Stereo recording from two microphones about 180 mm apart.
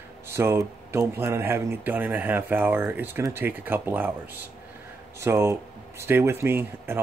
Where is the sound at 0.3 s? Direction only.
15° right (ahead or behind).